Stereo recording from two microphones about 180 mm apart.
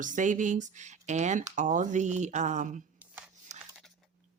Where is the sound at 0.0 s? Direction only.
45° right (ahead or behind).